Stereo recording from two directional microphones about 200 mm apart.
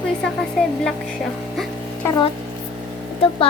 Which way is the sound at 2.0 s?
20° left (ahead or behind).